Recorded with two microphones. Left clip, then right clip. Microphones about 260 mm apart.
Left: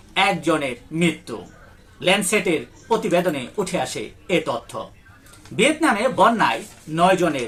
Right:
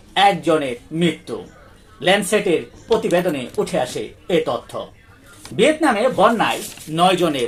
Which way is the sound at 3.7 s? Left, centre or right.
Centre.